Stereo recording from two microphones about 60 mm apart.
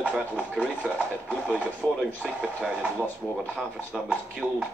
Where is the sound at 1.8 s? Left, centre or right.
Left.